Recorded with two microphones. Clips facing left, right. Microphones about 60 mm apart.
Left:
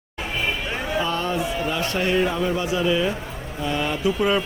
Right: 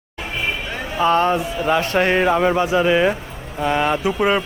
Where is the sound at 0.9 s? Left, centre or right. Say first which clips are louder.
Right 9 dB; right.